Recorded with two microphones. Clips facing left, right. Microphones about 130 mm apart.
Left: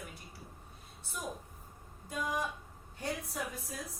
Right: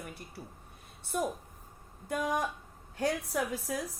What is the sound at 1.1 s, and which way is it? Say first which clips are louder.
Speech: right 10 dB; 55° right (ahead or behind).